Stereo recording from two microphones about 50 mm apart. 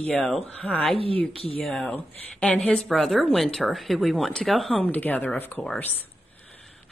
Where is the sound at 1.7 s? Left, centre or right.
Centre.